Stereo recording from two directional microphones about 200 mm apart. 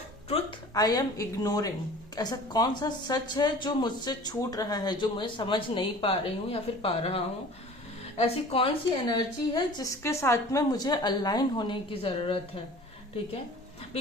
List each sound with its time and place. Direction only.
0.7 s a woman's voice: 20° left (ahead or behind)